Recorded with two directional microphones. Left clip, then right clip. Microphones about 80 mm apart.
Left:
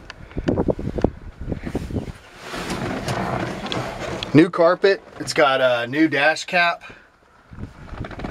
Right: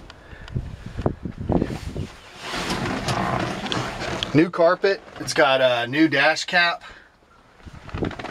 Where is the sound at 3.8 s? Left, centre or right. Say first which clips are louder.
Even; centre.